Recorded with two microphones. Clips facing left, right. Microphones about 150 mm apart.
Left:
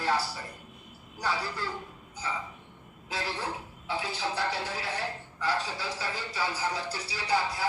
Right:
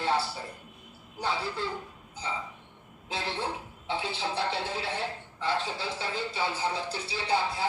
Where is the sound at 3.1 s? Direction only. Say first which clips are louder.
Right 1 dB; 25° right (ahead or behind).